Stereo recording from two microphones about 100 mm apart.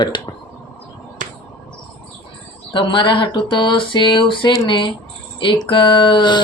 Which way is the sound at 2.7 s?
55° left (ahead or behind).